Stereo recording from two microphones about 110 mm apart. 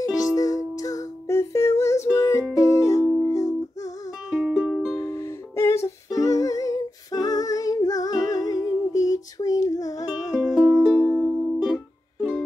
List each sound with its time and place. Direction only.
0.4 s music: 30° left (ahead or behind)
4.3 s music: 5° right (ahead or behind)
4.9 s music: 25° left (ahead or behind)
10.7 s music: 5° right (ahead or behind)